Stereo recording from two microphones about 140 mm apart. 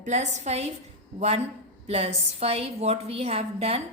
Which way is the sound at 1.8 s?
50° right (ahead or behind).